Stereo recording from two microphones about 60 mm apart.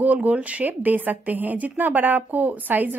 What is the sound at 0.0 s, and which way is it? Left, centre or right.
Speech, right.